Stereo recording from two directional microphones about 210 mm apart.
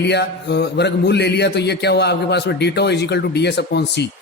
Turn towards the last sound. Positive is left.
turn(degrees=50)  # may be behind; listen again after turning